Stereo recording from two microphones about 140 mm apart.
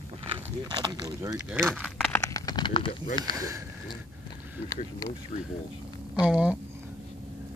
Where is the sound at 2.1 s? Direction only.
25° left (ahead or behind).